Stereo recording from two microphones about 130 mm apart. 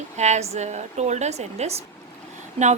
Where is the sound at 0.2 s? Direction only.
60° right (ahead or behind).